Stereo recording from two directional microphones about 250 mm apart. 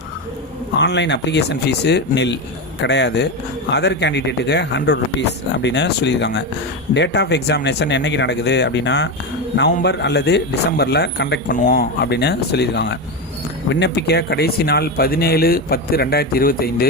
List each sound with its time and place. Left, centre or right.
0.8 s speech: left